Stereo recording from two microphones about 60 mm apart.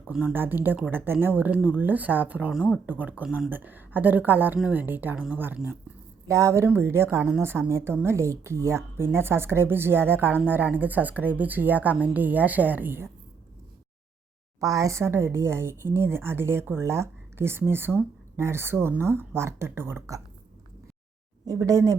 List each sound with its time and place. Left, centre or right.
0.3 s speech: right
6.2 s a woman's voice: right
6.7 s speech: right
14.6 s speech: right
21.4 s a woman's voice: right